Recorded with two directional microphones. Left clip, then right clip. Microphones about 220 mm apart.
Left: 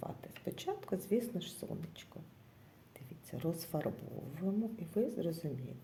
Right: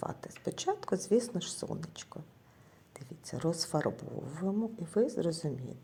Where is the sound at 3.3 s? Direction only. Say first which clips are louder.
Right 6 dB; 15° right (ahead or behind).